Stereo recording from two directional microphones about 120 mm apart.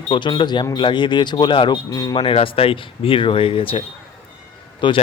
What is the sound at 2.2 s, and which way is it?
Speech, 45° left (ahead or behind).